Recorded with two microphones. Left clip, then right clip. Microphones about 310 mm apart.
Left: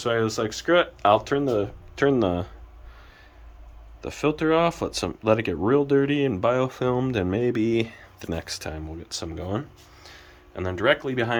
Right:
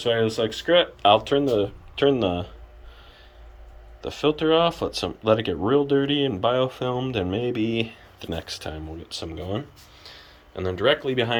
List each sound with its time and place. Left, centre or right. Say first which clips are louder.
0.0 s speech: right 2 dB; centre
4.0 s speech: right 2 dB; centre